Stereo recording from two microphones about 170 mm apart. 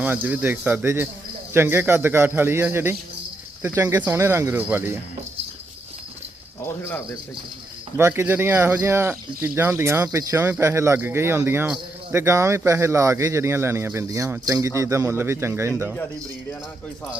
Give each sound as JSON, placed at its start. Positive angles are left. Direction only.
{"t": 0.0, "sound": "speech", "side_deg": -10}
{"t": 6.8, "sound": "speech", "side_deg": 10}
{"t": 7.9, "sound": "speech", "side_deg": -15}